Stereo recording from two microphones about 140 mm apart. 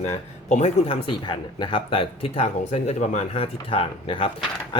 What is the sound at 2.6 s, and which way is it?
Speech, 55° left (ahead or behind).